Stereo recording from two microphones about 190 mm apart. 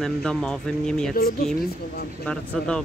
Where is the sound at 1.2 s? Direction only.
55° left (ahead or behind).